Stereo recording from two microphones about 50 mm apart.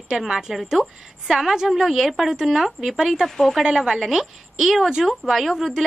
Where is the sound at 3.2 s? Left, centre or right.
Centre.